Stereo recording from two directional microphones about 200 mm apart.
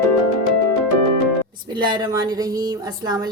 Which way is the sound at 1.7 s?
20° right (ahead or behind).